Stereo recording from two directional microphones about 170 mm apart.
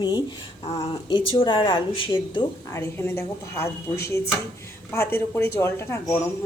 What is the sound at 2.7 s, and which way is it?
A woman's voice, 15° left (ahead or behind).